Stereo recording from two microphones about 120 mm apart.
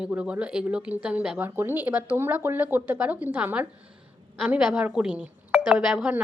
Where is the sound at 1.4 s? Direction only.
15° right (ahead or behind).